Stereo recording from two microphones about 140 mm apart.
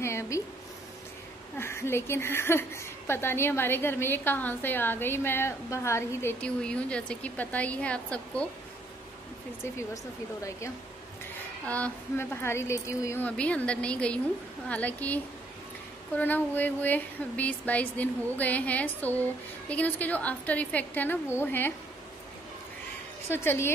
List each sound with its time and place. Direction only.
0.0 s speech: 20° left (ahead or behind)
1.6 s a woman's voice: 20° left (ahead or behind)
6.4 s a woman's voice: 5° left (ahead or behind)
11.6 s a woman's voice: 10° left (ahead or behind)
23.2 s a woman's voice: 15° left (ahead or behind)